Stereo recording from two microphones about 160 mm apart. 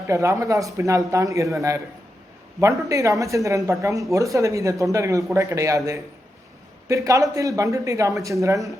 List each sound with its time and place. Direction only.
0.1 s speech: 20° right (ahead or behind)